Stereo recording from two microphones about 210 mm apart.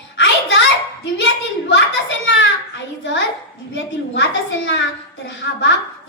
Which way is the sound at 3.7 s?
60° left (ahead or behind).